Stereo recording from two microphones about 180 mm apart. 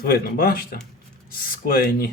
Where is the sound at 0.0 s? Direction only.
55° left (ahead or behind).